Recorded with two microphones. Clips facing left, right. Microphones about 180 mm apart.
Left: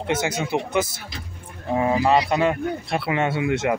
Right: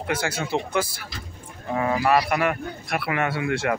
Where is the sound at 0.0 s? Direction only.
20° left (ahead or behind).